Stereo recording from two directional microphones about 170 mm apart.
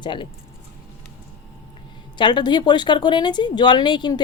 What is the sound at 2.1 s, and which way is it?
A woman's voice, 25° left (ahead or behind).